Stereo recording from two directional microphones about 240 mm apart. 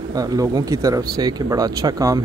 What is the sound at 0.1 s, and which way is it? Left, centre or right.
Speech, centre.